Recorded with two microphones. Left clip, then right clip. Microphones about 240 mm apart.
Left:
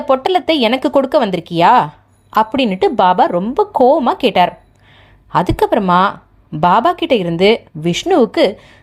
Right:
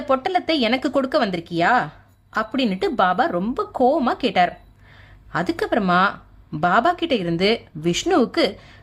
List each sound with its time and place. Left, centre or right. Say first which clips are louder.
0.0 s speech: left 7 dB; centre